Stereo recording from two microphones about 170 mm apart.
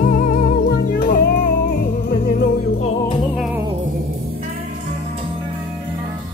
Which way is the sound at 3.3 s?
5° right (ahead or behind).